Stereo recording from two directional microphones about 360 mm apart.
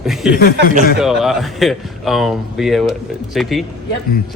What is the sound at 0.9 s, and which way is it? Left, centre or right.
Speech, centre.